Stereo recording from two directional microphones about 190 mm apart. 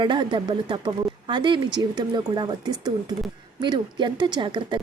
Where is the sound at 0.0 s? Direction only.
25° right (ahead or behind).